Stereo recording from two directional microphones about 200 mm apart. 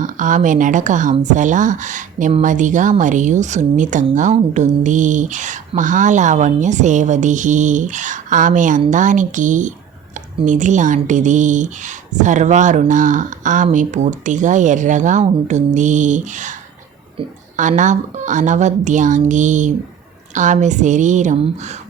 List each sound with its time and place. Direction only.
0.0 s speech: 40° right (ahead or behind)
17.6 s speech: 40° right (ahead or behind)